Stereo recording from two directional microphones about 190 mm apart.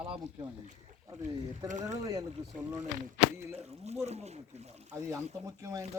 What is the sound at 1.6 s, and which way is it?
Speech, 40° right (ahead or behind).